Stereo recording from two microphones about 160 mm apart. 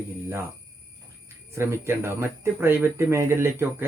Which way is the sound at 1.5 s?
15° right (ahead or behind).